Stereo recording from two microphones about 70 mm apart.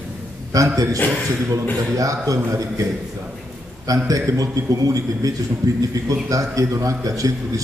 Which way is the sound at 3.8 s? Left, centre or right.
Right.